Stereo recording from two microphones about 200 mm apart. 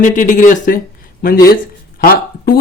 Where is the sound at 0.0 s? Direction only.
40° left (ahead or behind).